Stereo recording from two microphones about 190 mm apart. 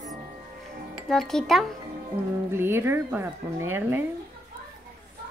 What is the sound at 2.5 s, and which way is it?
A woman's voice, 10° right (ahead or behind).